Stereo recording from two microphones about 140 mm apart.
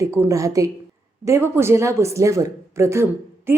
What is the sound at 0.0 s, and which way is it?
A woman's voice, 20° right (ahead or behind).